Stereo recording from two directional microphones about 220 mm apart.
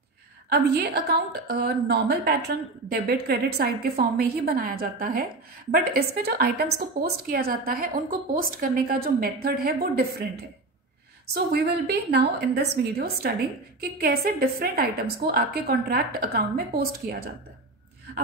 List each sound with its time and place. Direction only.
0.5 s a woman's voice: 45° right (ahead or behind)
11.3 s a woman's voice: 45° right (ahead or behind)